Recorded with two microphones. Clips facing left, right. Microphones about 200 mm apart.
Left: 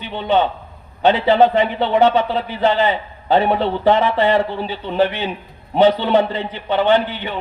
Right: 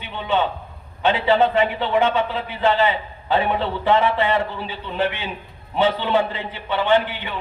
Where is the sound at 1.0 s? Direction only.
40° left (ahead or behind).